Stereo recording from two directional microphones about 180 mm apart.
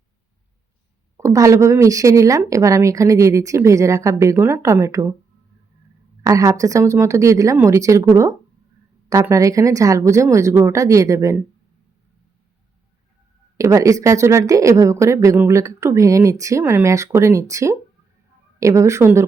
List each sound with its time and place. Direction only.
1.1 s speech: 20° right (ahead or behind)
6.2 s speech: 20° right (ahead or behind)
13.6 s speech: 15° right (ahead or behind)